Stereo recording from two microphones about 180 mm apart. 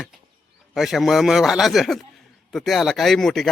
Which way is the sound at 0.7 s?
Centre (ahead or behind).